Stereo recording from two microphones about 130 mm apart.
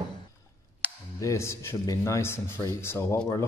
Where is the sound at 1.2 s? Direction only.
20° left (ahead or behind).